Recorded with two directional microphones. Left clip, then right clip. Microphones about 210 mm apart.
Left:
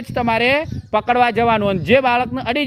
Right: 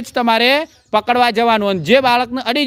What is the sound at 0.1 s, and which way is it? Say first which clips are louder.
Speech: right 3 dB; 30° right (ahead or behind).